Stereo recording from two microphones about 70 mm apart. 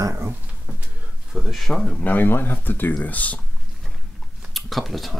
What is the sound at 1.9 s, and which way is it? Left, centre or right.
Speech, left.